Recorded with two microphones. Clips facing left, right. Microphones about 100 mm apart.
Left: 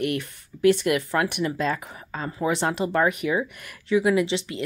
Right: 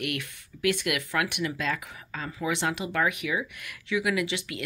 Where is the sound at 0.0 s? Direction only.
35° left (ahead or behind).